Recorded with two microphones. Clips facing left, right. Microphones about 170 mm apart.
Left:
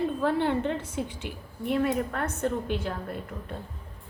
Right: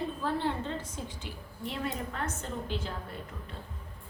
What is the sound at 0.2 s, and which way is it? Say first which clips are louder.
A woman's voice: left 6 dB; 65° left (ahead or behind).